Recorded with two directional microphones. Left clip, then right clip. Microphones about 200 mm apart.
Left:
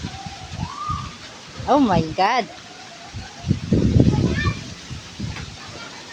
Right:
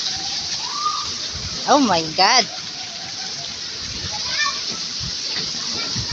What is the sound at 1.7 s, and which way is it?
Speech, 15° left (ahead or behind).